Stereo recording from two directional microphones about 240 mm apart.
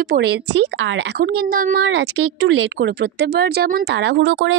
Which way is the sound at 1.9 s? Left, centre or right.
Right.